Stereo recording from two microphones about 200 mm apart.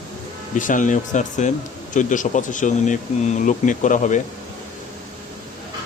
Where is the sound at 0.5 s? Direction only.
40° left (ahead or behind).